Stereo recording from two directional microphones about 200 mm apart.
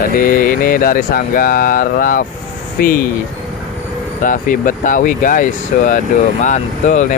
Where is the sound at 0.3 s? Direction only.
45° left (ahead or behind).